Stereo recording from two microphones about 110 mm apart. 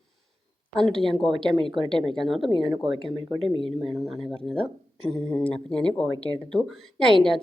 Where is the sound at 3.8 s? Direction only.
Centre (ahead or behind).